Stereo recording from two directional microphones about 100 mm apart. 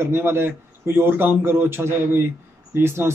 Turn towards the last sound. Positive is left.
turn(degrees=-25)  # may be behind; listen again after turning